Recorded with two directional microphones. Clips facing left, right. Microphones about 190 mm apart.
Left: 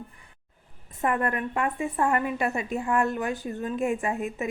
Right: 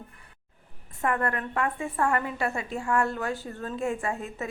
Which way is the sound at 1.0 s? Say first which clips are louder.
Left 2 dB; 20° left (ahead or behind).